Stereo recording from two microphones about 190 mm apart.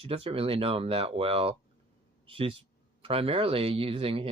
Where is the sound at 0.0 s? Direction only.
30° right (ahead or behind).